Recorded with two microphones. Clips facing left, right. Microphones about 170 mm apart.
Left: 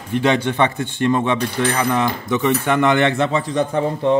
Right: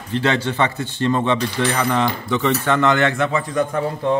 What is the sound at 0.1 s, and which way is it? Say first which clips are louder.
Speech: left 2 dB; 15° left (ahead or behind).